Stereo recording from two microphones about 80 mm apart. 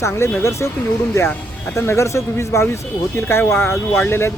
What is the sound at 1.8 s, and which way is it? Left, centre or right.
Speech, left.